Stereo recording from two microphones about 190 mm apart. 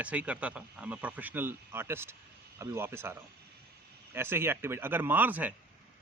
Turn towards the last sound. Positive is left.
turn(degrees=-10)  # may be behind; listen again after turning